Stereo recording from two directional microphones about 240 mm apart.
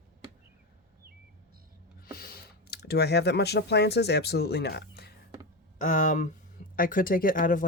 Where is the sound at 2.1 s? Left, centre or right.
Left.